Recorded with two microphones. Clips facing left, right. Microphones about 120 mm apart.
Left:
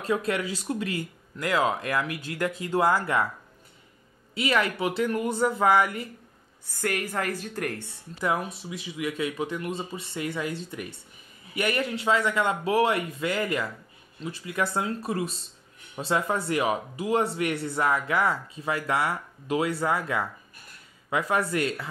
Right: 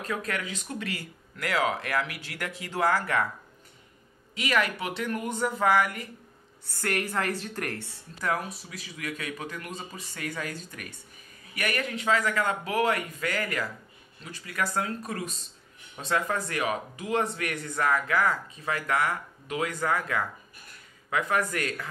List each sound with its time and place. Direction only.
0.0 s speech: 30° left (ahead or behind)
0.8 s speech: 20° left (ahead or behind)
4.4 s speech: 30° left (ahead or behind)
6.7 s a woman's voice: 15° left (ahead or behind); by 21.8 s 30° left (ahead or behind)